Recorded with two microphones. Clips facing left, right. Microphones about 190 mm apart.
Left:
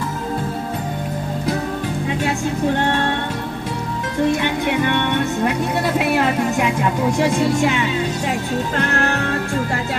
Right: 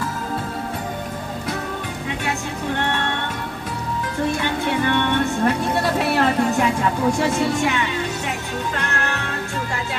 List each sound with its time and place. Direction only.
4.4 s speech: 15° left (ahead or behind)